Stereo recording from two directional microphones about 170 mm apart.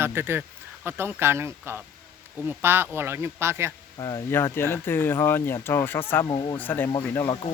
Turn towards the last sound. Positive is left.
turn(degrees=20)  # may be behind; listen again after turning